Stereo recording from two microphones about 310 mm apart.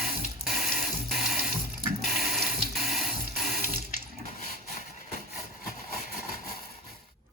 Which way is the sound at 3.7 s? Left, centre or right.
Right.